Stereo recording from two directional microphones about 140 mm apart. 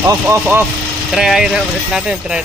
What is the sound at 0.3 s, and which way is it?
Speech, 15° right (ahead or behind).